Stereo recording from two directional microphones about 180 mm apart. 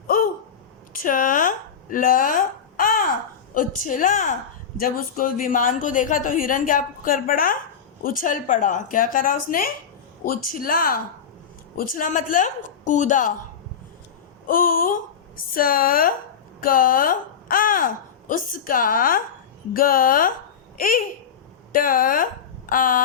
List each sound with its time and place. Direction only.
0.9 s a sound: 50° left (ahead or behind)
3.5 s a woman's voice: 50° left (ahead or behind)
14.4 s a woman's voice: 50° left (ahead or behind)